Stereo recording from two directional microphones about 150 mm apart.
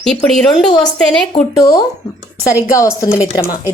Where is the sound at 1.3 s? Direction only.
30° left (ahead or behind).